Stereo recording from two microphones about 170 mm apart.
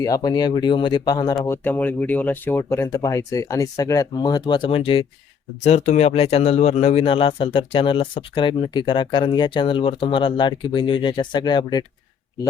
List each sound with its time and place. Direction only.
0.0 s speech: 20° left (ahead or behind)
1.5 s speech: 10° left (ahead or behind)